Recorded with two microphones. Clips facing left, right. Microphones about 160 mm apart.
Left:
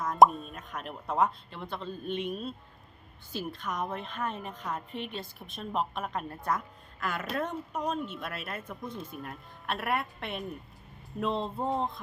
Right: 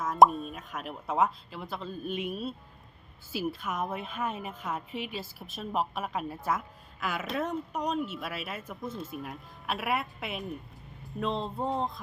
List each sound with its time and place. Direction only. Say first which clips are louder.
0.0 s a woman's voice: even; centre (ahead or behind)